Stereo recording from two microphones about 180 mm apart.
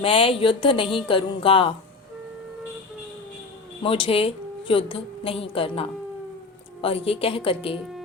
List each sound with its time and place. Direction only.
0.0 s a woman's voice: 30° left (ahead or behind)
3.8 s a woman's voice: 30° left (ahead or behind)